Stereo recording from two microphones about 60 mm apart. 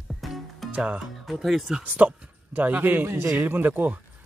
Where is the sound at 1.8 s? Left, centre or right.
Right.